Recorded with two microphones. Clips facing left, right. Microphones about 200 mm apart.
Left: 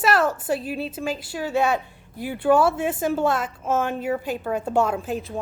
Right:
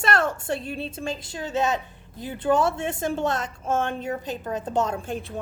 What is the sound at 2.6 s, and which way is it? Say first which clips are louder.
A woman's voice: left 3 dB; 5° left (ahead or behind).